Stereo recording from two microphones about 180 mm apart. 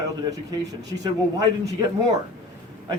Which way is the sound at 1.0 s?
20° right (ahead or behind).